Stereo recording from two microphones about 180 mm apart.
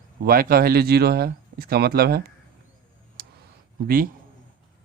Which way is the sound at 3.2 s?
55° right (ahead or behind).